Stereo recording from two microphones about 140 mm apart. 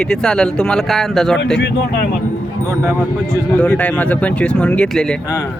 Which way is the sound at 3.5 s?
10° left (ahead or behind).